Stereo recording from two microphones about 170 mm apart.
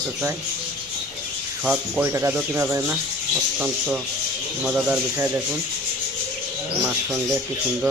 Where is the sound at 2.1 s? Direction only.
15° right (ahead or behind).